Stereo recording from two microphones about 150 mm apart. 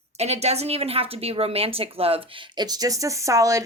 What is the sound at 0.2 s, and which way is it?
Speech, 45° right (ahead or behind).